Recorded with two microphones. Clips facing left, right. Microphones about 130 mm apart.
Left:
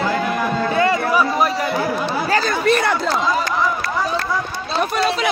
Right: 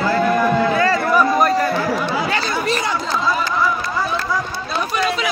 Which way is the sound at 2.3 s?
50° left (ahead or behind).